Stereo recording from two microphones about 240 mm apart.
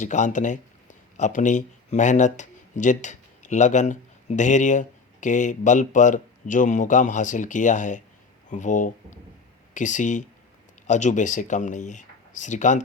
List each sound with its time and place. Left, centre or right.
0.0 s speech: left